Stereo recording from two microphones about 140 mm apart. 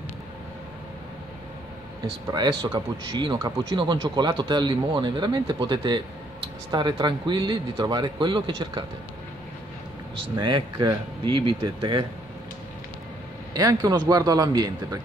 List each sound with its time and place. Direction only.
2.3 s speech: 35° right (ahead or behind)
10.4 s speech: 30° right (ahead or behind)
13.5 s a man's voice: 30° right (ahead or behind)